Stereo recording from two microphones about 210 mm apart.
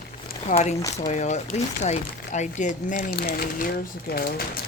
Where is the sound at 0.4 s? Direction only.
35° left (ahead or behind).